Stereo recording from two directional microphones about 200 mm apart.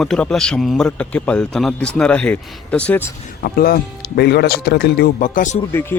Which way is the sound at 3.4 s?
50° left (ahead or behind).